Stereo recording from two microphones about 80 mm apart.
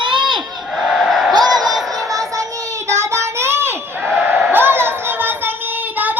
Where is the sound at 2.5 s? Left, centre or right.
Right.